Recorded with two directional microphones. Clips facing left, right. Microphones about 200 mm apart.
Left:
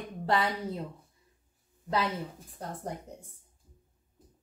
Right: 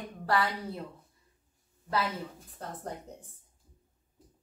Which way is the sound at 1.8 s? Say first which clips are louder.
Left 1 dB; 15° left (ahead or behind).